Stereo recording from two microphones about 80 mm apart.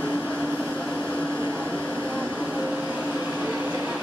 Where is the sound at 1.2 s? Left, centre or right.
Right.